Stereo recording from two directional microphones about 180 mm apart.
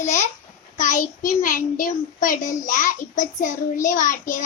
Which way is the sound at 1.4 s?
50° left (ahead or behind).